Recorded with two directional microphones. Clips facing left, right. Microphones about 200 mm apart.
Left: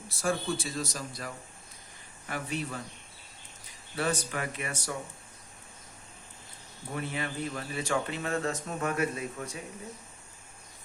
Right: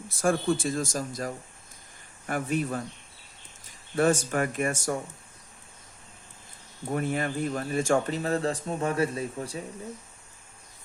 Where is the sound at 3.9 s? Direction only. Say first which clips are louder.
Right 8 dB; 50° right (ahead or behind).